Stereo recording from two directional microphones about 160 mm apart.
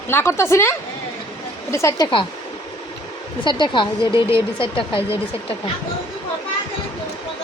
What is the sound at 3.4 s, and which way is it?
Speech, 30° left (ahead or behind).